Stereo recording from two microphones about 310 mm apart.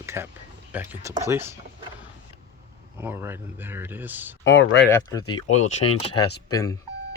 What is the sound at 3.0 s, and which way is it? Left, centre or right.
Speech, centre.